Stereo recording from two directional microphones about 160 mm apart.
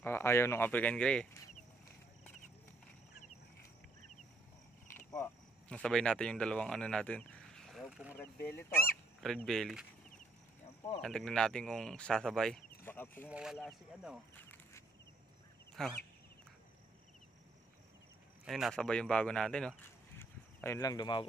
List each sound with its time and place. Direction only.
0.0 s speech: 15° left (ahead or behind)
4.9 s a sound: 15° left (ahead or behind)
5.7 s speech: 5° left (ahead or behind)
11.0 s speech: 5° left (ahead or behind)
13.3 s speech: 5° right (ahead or behind)
15.8 s speech: 5° left (ahead or behind)
18.4 s speech: centre (ahead or behind)
20.2 s a sound: 15° left (ahead or behind)